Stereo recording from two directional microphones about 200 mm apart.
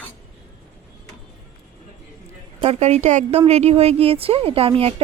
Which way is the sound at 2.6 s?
30° right (ahead or behind).